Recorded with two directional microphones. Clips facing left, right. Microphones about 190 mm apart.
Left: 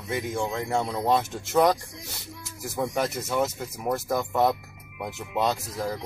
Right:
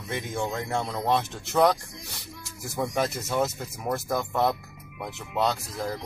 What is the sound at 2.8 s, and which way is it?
Speech, centre (ahead or behind).